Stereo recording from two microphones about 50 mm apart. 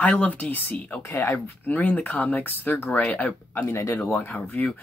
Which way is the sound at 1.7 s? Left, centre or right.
Left.